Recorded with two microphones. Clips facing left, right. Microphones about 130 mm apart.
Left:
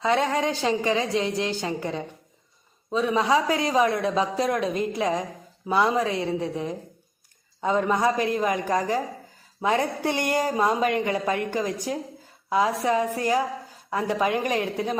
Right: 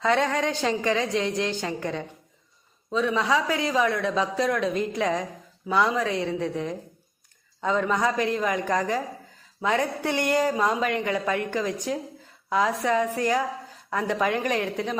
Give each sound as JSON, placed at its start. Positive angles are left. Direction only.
{"t": 0.1, "sound": "a woman's voice", "side_deg": 25}
{"t": 2.9, "sound": "a man's voice", "side_deg": 15}
{"t": 3.2, "sound": "a woman's voice", "side_deg": 30}
{"t": 7.9, "sound": "a woman's voice", "side_deg": 30}